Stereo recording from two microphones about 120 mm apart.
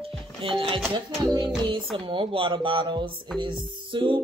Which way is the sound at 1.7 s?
45° right (ahead or behind).